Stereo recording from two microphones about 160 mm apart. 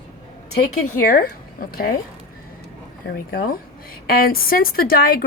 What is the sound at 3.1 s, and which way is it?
A woman's voice, 75° left (ahead or behind).